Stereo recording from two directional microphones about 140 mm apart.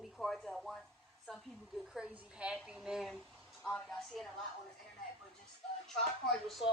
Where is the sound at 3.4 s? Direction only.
5° left (ahead or behind).